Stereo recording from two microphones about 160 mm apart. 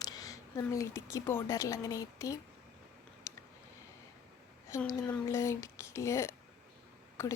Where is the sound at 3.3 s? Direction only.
15° left (ahead or behind).